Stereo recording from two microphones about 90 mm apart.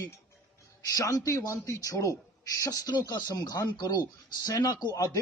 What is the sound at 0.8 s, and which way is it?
A man's voice, 40° left (ahead or behind).